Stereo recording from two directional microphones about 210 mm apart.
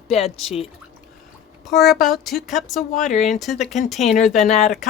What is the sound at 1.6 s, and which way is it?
Speech, centre (ahead or behind).